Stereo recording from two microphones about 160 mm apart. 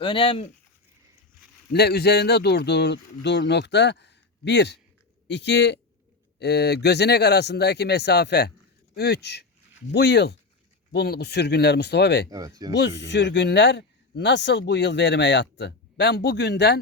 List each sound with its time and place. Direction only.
0.0 s speech: 35° left (ahead or behind)
1.7 s speech: 85° left
12.3 s speech: 20° right (ahead or behind)
12.7 s speech: 90° left